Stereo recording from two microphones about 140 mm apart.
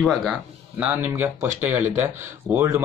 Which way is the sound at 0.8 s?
10° right (ahead or behind).